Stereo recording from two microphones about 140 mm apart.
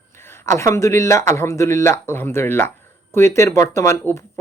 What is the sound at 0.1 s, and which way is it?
A man's voice, 15° left (ahead or behind).